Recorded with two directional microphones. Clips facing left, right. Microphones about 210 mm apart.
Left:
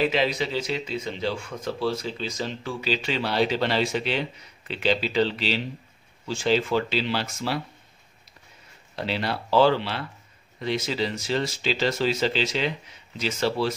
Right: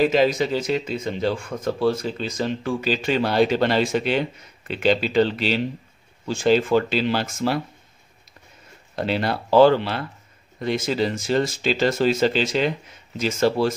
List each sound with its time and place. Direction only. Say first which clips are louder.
0.0 s speech: right 5 dB; 45° right (ahead or behind)
8.9 s speech: right 5 dB; 50° right (ahead or behind)